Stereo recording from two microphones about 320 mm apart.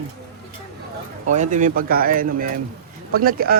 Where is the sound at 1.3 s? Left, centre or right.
Right.